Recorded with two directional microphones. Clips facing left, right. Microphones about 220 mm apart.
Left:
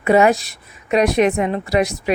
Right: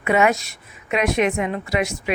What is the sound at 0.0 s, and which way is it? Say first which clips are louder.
Speech: left 5 dB; 35° left (ahead or behind).